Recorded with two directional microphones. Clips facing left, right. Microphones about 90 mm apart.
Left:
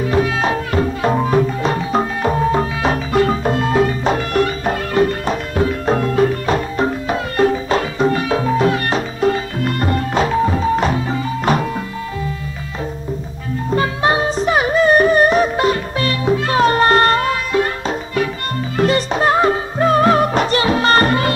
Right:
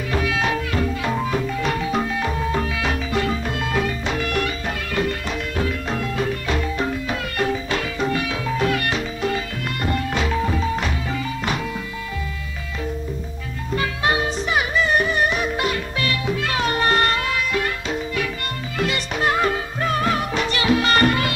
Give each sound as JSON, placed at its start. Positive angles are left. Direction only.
{"t": 0.0, "sound": "music", "side_deg": 35}
{"t": 13.7, "sound": "music", "side_deg": 35}